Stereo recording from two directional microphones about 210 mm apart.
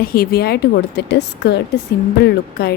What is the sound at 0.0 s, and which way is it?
A woman's voice, 45° left (ahead or behind).